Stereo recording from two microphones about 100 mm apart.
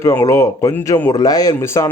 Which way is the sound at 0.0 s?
30° left (ahead or behind).